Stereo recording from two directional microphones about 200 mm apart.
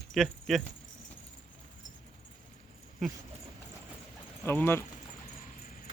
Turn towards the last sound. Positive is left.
turn(degrees=10)  # may be behind; listen again after turning